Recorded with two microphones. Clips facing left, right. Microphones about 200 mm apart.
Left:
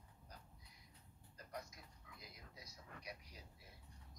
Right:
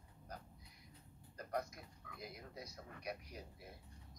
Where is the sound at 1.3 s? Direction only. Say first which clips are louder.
Right 9 dB; 60° right (ahead or behind).